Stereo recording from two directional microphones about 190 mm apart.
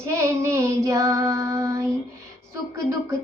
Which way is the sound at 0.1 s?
15° right (ahead or behind).